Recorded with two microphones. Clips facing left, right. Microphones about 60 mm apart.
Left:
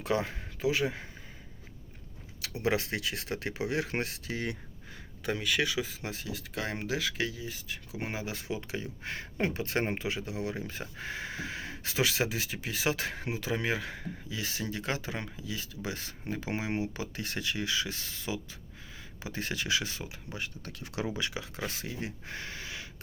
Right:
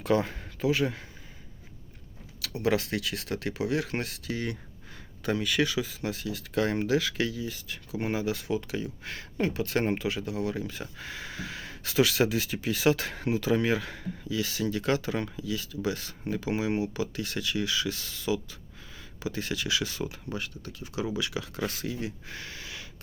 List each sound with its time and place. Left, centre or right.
0.0 s speech: centre
2.4 s speech: left
5.2 s speech: centre; by 6.4 s left
6.5 s speech: centre; by 19.9 s left
19.9 s speech: centre
20.6 s speech: left
21.2 s speech: left